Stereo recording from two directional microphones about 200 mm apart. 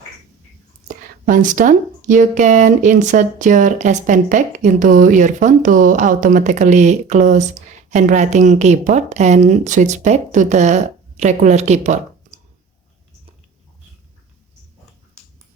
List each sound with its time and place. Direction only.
0.9 s speech: 45° right (ahead or behind)